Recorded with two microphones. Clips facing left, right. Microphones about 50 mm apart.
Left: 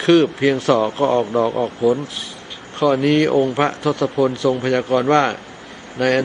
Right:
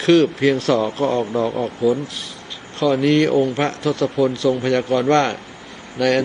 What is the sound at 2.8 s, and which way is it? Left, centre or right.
Speech, centre.